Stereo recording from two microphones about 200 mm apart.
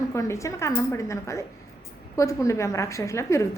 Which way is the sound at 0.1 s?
15° left (ahead or behind).